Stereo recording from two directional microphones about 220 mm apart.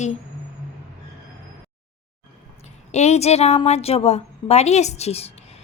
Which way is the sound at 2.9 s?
30° left (ahead or behind).